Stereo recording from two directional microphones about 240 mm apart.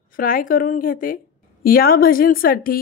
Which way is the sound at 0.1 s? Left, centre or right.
Left.